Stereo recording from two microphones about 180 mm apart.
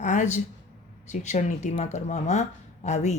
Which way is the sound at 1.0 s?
40° left (ahead or behind).